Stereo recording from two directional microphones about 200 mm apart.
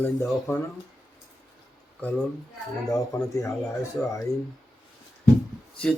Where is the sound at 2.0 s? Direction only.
5° left (ahead or behind).